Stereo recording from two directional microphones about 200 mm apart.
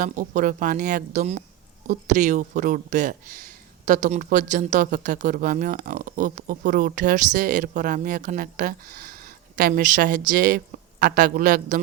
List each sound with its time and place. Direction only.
0.0 s speech: 40° right (ahead or behind)